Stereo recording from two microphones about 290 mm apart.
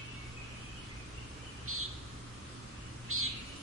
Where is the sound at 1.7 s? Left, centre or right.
Right.